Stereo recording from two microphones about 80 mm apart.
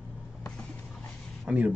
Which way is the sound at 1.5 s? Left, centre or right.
Centre.